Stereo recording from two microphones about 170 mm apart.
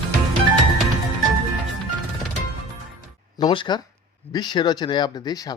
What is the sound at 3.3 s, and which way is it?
A woman's voice, 25° left (ahead or behind).